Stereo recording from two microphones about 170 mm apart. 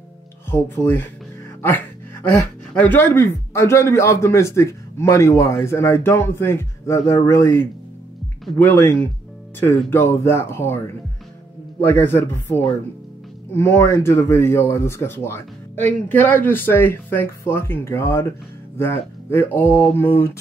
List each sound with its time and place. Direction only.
0.5 s speech: 10° left (ahead or behind)
1.6 s music: 10° left (ahead or behind)
2.7 s speech: 10° left (ahead or behind)
11.8 s speech: 10° left (ahead or behind)